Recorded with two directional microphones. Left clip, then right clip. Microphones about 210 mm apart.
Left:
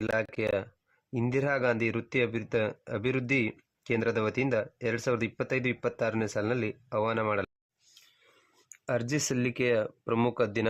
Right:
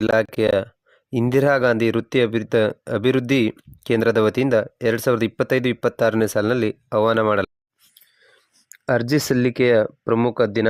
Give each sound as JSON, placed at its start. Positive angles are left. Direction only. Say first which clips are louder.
{"t": 0.0, "sound": "speech", "louder": "right 12 dB", "side_deg": -40}
{"t": 8.7, "sound": "speech", "louder": "right 11 dB", "side_deg": -40}